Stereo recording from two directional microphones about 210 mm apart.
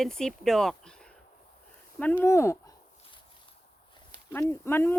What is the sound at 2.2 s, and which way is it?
Speech, 10° left (ahead or behind).